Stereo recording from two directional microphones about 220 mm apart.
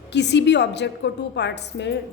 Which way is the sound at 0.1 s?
50° left (ahead or behind).